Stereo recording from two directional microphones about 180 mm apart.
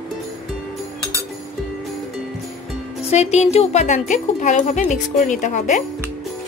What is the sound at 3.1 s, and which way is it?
Speech, 40° left (ahead or behind).